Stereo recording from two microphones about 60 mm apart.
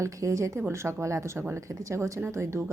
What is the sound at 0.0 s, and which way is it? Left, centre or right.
Speech, right.